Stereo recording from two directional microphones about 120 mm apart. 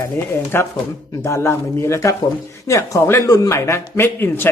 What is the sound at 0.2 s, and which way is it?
Speech, 20° left (ahead or behind).